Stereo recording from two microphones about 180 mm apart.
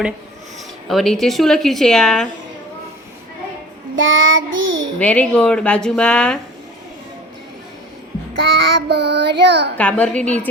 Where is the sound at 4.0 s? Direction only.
90° right.